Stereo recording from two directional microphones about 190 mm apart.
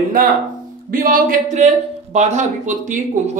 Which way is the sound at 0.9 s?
50° right (ahead or behind).